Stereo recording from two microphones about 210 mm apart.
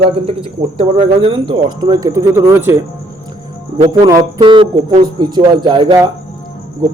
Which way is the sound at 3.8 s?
20° right (ahead or behind).